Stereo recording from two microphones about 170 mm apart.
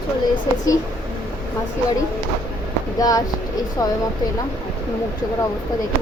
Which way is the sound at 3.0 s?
20° left (ahead or behind).